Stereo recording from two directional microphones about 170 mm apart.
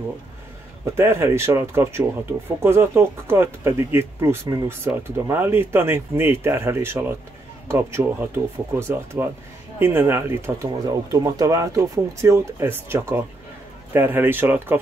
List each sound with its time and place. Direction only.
0.9 s speech: 15° right (ahead or behind)